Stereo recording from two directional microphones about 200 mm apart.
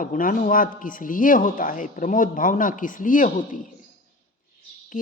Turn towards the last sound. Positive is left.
turn(degrees=45)  # may be behind; listen again after turning